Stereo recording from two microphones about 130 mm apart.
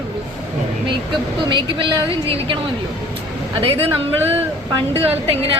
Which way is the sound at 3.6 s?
45° right (ahead or behind).